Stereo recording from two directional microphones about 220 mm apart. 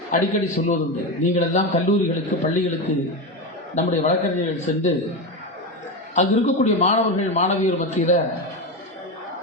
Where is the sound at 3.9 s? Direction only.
35° left (ahead or behind).